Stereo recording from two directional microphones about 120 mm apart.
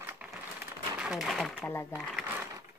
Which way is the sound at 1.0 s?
5° right (ahead or behind).